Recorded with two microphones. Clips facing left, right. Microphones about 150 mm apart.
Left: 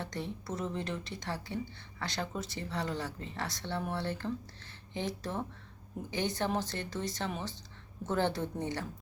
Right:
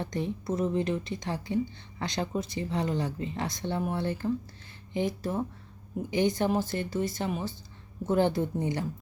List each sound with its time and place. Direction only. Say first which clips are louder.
0.0 s speech: right 7 dB; 15° right (ahead or behind)